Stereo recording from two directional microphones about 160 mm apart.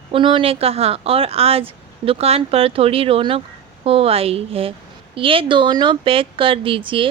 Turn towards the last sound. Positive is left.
turn(degrees=-35)  # may be behind; listen again after turning